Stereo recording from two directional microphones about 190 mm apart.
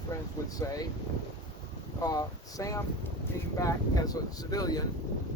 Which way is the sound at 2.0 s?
20° left (ahead or behind).